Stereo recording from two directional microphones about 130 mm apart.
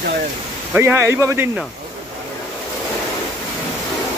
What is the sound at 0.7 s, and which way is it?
Speech, 15° right (ahead or behind).